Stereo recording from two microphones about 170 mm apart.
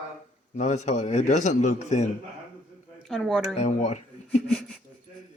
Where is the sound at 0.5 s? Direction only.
45° left (ahead or behind).